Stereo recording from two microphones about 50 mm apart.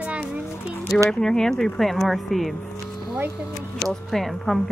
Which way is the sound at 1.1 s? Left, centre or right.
Centre.